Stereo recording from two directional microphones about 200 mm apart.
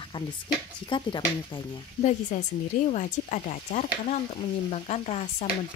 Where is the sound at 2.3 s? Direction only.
35° left (ahead or behind).